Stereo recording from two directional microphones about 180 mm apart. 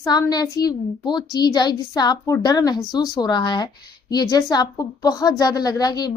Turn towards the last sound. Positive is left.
turn(degrees=20)  # may be behind; listen again after turning